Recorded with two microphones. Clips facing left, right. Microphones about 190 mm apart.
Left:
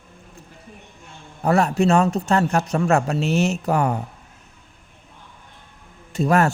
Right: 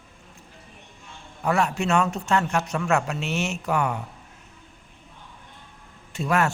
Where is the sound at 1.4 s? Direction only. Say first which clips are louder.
Left 6 dB; 35° left (ahead or behind).